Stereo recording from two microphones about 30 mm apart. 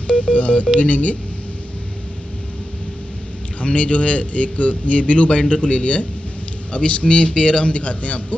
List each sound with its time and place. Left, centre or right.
0.0 s speech: left
3.6 s a man's voice: left